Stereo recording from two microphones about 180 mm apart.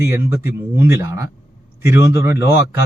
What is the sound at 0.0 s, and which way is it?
Speech, 15° right (ahead or behind).